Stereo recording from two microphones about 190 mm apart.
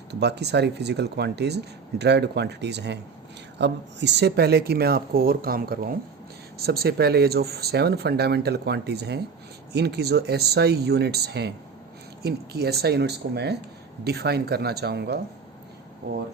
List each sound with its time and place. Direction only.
0.1 s speech: 60° right (ahead or behind)